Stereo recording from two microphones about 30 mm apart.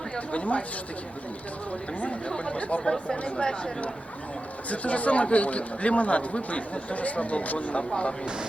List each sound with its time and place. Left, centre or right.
0.3 s speech: left
2.4 s speech: left
2.8 s speech: left
3.3 s speech: left
4.7 s speech: left
7.9 s speech: left